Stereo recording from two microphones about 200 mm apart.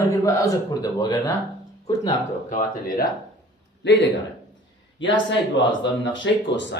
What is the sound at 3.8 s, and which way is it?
Speech, 60° left (ahead or behind).